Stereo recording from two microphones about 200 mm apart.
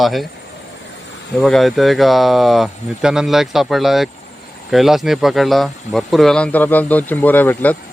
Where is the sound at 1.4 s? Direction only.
Centre (ahead or behind).